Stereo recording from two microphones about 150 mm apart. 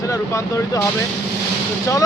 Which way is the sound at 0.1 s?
20° left (ahead or behind).